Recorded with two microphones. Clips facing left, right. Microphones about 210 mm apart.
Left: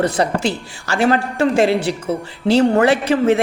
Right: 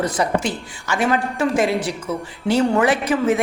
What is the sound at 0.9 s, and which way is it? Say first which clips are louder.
Speech: left 4 dB; 35° left (ahead or behind).